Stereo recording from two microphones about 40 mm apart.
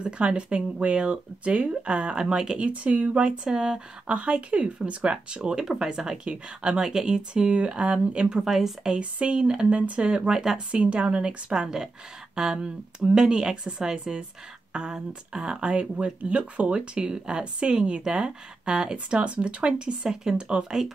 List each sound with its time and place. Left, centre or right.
0.0 s speech: right
2.7 s speech: right
3.3 s speech: centre
4.1 s speech: right; by 6.1 s centre
6.2 s speech: right
6.8 s speech: centre
8.5 s speech: centre
8.9 s speech: right
10.7 s speech: right